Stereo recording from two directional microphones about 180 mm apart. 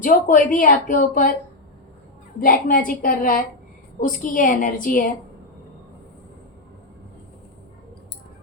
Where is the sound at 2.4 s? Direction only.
50° left (ahead or behind).